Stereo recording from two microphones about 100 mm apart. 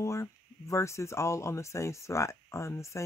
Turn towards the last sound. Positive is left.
turn(degrees=30)  # may be behind; listen again after turning